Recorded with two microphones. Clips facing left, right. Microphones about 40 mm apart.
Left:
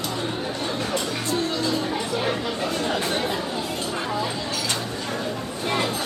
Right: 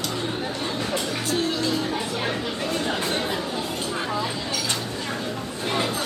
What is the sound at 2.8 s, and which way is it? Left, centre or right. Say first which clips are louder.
Speech: left 1 dB; centre.